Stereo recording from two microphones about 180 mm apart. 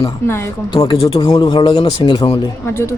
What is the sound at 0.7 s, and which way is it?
Speech, 25° left (ahead or behind).